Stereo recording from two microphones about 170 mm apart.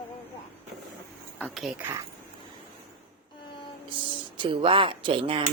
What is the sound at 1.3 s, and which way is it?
Speech, 5° left (ahead or behind).